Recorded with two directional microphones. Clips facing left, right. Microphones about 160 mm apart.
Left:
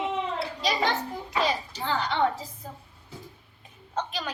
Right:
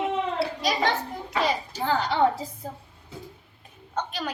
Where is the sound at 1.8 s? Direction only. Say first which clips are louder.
Right 4 dB; 40° right (ahead or behind).